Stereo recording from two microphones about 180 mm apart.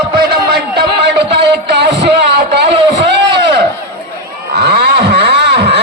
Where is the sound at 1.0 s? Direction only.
70° right (ahead or behind).